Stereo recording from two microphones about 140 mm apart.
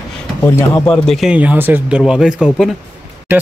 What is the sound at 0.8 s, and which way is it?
Speech, 5° left (ahead or behind).